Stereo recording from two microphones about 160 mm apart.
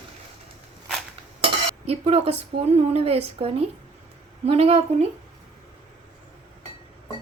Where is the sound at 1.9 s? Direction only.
40° right (ahead or behind).